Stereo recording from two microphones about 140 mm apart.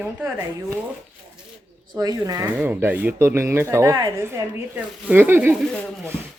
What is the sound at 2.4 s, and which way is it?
Speech, 15° right (ahead or behind).